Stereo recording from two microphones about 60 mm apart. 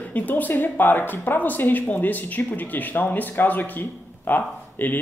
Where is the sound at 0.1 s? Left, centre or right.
Left.